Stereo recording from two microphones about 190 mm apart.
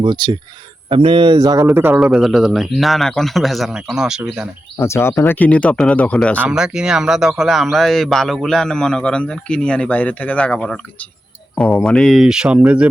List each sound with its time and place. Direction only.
0.0 s speech: 25° right (ahead or behind)
2.0 s a man's voice: centre (ahead or behind)
4.8 s a man's voice: 15° left (ahead or behind); by 12.9 s 5° right (ahead or behind)